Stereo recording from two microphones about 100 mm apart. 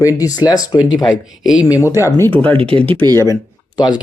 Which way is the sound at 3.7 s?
45° left (ahead or behind).